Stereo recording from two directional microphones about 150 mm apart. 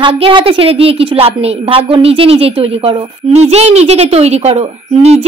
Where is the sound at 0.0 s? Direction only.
35° right (ahead or behind).